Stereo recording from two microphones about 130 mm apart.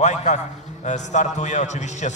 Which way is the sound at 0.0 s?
65° left (ahead or behind).